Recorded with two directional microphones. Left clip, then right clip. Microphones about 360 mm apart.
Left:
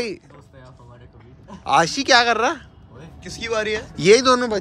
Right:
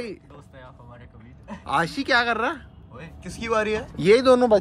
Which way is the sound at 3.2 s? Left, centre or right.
Centre.